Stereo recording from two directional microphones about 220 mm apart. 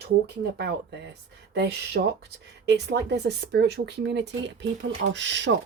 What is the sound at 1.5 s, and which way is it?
Speech, 50° right (ahead or behind).